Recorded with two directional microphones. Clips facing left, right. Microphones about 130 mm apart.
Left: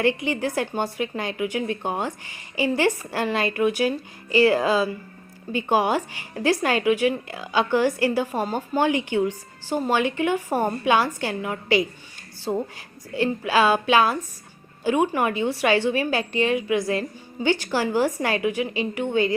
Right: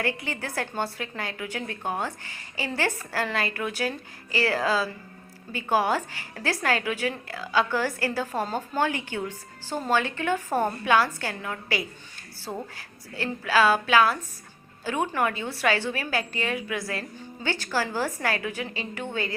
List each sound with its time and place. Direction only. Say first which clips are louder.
0.0 s a woman's voice: left 8 dB; 20° left (ahead or behind)